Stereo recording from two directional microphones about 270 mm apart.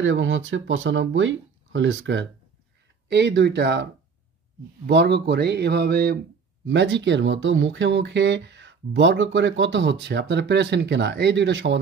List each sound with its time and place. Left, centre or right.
0.0 s speech: right